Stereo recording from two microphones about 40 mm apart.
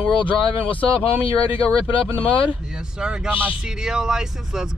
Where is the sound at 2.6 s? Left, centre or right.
Centre.